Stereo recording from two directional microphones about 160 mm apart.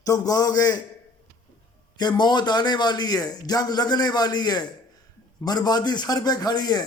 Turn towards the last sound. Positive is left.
turn(degrees=25)  # may be behind; listen again after turning